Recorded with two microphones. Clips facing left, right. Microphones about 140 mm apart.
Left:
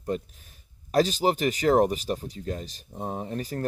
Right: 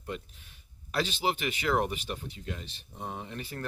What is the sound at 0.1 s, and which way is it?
Speech, 40° left (ahead or behind).